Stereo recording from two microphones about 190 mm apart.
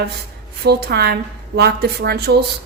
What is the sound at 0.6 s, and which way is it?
A woman's voice, 60° right (ahead or behind).